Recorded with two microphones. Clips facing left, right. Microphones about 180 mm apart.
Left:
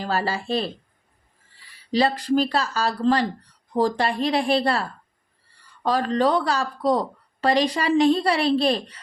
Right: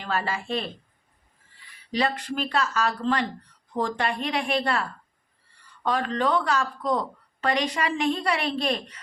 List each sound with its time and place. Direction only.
0.0 s a woman's voice: 35° left (ahead or behind)